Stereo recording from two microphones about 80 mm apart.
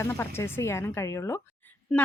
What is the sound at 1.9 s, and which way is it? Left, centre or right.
Speech, centre.